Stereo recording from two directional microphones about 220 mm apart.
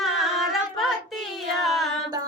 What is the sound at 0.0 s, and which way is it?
Singing, centre (ahead or behind).